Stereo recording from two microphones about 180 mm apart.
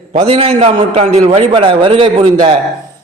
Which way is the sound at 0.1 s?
35° right (ahead or behind).